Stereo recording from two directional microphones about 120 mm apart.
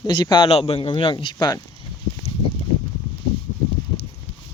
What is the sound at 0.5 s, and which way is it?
Speech, 50° left (ahead or behind).